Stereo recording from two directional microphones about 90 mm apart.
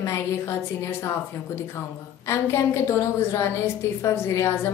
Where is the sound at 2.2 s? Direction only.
30° left (ahead or behind).